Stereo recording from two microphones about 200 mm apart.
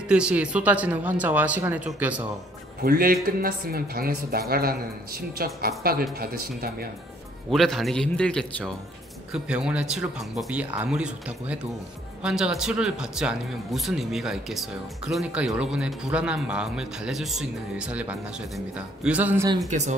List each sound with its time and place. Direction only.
0.1 s speech: 5° right (ahead or behind)
2.8 s speech: 50° right (ahead or behind)
7.5 s a man's voice: centre (ahead or behind)
19.7 s speech: 35° right (ahead or behind)